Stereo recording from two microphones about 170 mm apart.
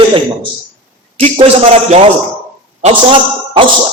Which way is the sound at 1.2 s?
35° right (ahead or behind).